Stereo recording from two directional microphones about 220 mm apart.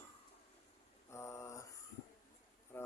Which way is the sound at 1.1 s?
15° left (ahead or behind).